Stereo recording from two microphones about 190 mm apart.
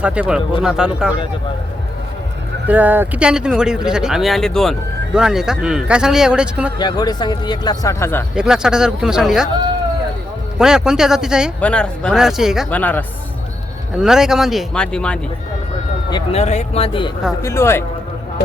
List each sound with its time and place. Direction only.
0.0 s speech: 5° right (ahead or behind)
2.6 s speech: 10° right (ahead or behind)
6.7 s speech: 20° left (ahead or behind)
8.4 s speech: 5° right (ahead or behind)
10.6 s speech: 5° right (ahead or behind)
12.7 s speech: 10° left (ahead or behind)
14.0 s speech: 5° right (ahead or behind)
16.0 s speech: 25° left (ahead or behind)
16.4 s speech: 35° left (ahead or behind)
17.4 s speech: 15° left (ahead or behind)